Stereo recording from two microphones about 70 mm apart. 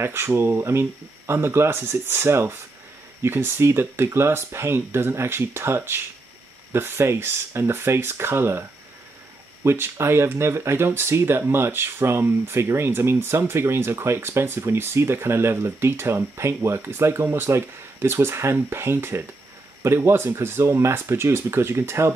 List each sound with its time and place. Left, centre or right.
0.0 s speech: right